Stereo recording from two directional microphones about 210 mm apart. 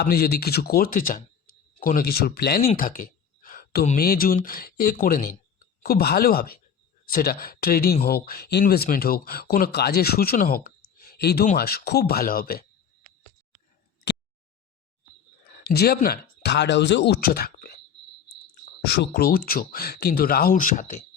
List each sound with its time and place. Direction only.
0.0 s speech: 45° left (ahead or behind)
2.7 s a sound: 40° left (ahead or behind)
3.8 s speech: 45° left (ahead or behind)
15.4 s speech: 50° left (ahead or behind)
18.8 s speech: 50° left (ahead or behind)